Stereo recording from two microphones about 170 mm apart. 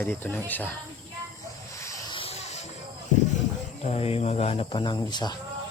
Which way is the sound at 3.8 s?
40° left (ahead or behind).